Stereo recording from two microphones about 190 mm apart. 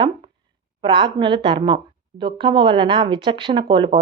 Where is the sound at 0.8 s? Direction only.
25° right (ahead or behind).